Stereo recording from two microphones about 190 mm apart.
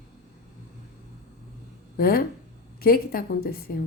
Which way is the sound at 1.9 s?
50° left (ahead or behind).